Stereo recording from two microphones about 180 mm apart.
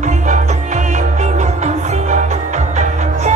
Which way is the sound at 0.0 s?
40° right (ahead or behind).